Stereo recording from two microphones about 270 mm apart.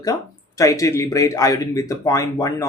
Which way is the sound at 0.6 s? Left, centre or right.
Centre.